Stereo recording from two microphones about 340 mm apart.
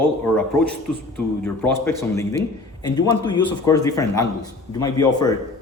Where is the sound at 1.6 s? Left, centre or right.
Centre.